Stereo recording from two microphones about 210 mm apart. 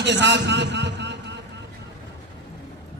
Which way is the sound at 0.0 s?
55° right (ahead or behind).